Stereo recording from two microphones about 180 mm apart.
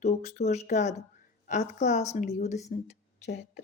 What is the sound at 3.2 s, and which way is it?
Speech, 65° left (ahead or behind).